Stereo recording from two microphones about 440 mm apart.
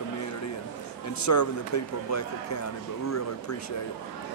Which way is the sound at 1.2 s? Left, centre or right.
Left.